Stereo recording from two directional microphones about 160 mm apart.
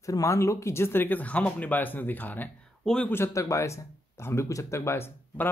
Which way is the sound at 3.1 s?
15° left (ahead or behind).